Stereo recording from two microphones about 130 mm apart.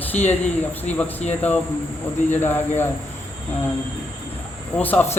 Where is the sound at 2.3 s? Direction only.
15° left (ahead or behind).